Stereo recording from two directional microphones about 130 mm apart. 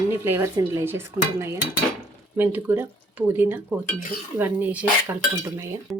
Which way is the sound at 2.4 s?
15° right (ahead or behind).